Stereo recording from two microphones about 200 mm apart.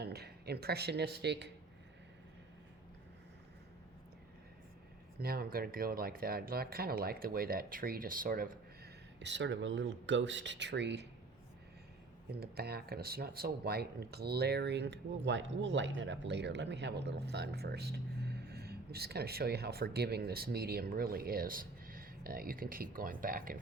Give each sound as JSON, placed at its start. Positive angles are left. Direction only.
{"t": 0.0, "sound": "speech", "side_deg": -55}
{"t": 5.2, "sound": "speech", "side_deg": -50}
{"t": 12.3, "sound": "speech", "side_deg": -50}